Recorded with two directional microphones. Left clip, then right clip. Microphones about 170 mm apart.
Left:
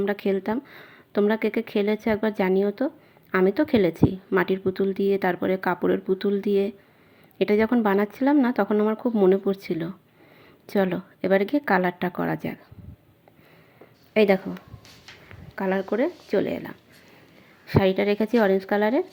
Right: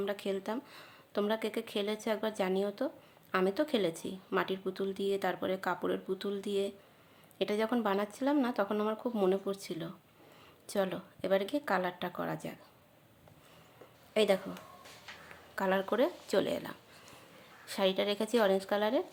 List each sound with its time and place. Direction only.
0.0 s a woman's voice: 30° left (ahead or behind)
14.1 s speech: 25° left (ahead or behind)
15.5 s speech: 10° left (ahead or behind)
17.7 s a woman's voice: 20° left (ahead or behind)